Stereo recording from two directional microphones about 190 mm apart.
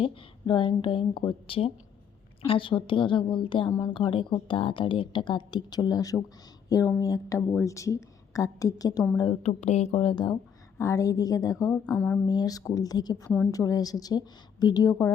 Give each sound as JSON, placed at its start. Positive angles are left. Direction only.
{"t": 0.0, "sound": "speech", "side_deg": 25}
{"t": 3.7, "sound": "a woman's voice", "side_deg": 15}
{"t": 9.4, "sound": "a woman's voice", "side_deg": 35}
{"t": 10.8, "sound": "speech", "side_deg": 15}
{"t": 11.7, "sound": "speech", "side_deg": 5}
{"t": 12.2, "sound": "speech", "side_deg": 20}